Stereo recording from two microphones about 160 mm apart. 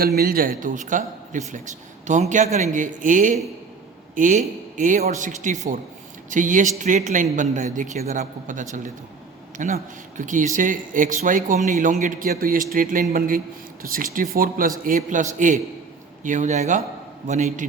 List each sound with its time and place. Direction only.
0.2 s speech: 65° right (ahead or behind)
14.8 s speech: 50° right (ahead or behind)